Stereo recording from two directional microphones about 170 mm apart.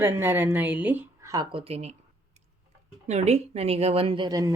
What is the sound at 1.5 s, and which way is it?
Speech, 35° right (ahead or behind).